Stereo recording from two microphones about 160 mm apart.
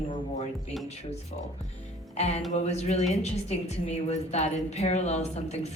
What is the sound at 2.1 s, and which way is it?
A woman's voice, 45° left (ahead or behind).